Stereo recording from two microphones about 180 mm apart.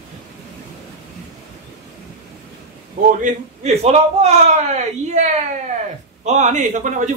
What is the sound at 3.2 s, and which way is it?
A man's voice, 40° right (ahead or behind).